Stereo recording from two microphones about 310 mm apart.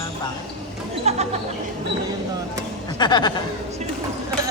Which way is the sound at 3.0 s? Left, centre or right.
Centre.